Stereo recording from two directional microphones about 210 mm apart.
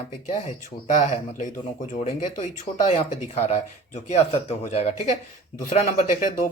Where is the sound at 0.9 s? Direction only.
35° left (ahead or behind).